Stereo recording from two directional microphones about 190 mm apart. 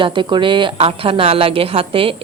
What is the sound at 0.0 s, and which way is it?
A woman's voice, 25° right (ahead or behind).